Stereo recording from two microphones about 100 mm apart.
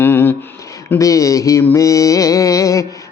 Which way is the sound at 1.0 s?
35° left (ahead or behind).